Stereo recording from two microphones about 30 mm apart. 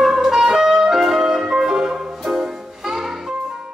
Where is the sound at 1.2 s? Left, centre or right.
Right.